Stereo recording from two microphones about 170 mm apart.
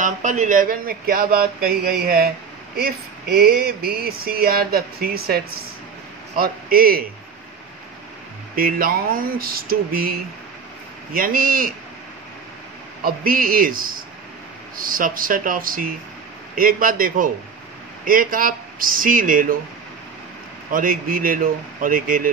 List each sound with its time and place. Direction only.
0.0 s speech: 45° right (ahead or behind)
3.3 s speech: 60° right (ahead or behind)
8.5 s speech: 55° right (ahead or behind)
11.1 s speech: 55° right (ahead or behind)
13.0 s speech: 55° right (ahead or behind)
20.7 s speech: 55° right (ahead or behind)